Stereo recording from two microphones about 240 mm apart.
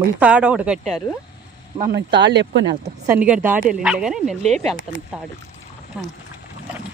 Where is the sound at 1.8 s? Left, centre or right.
Right.